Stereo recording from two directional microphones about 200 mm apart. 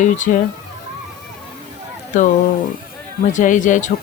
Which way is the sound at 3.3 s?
40° left (ahead or behind).